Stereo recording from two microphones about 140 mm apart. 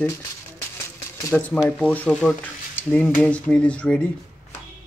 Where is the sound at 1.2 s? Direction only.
15° left (ahead or behind).